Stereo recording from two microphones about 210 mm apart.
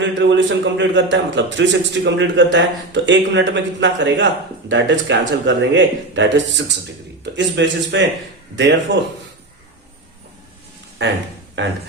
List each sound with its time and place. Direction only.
0.0 s a man's voice: 60° right (ahead or behind)
11.0 s a man's voice: 55° right (ahead or behind)